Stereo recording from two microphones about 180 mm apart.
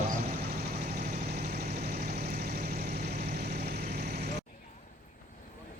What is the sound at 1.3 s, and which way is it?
Vehicle, 60° right (ahead or behind).